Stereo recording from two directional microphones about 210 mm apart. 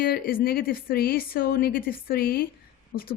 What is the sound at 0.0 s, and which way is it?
Speech, 45° left (ahead or behind).